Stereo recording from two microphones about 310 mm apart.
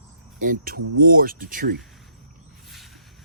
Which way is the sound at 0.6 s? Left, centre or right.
Right.